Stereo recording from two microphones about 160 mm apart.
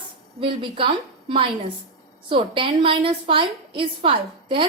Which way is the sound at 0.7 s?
35° right (ahead or behind).